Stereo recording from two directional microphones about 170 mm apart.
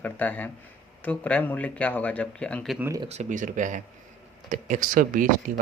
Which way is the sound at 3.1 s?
45° right (ahead or behind).